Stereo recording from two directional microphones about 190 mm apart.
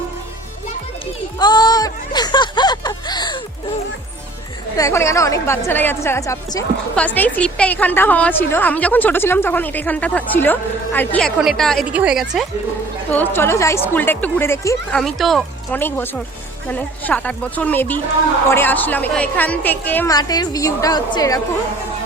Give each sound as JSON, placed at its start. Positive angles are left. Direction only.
{"t": 1.4, "sound": "a sound", "side_deg": 20}
{"t": 4.8, "sound": "a woman's voice", "side_deg": 15}
{"t": 13.1, "sound": "a woman's voice", "side_deg": 10}
{"t": 14.9, "sound": "a woman's voice", "side_deg": 0}
{"t": 20.1, "sound": "a woman's voice", "side_deg": 20}